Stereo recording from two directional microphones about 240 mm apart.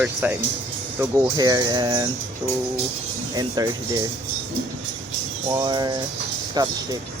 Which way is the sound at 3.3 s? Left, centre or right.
Centre.